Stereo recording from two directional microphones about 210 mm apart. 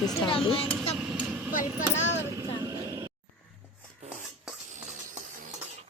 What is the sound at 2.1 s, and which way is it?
Vehicle, 15° right (ahead or behind).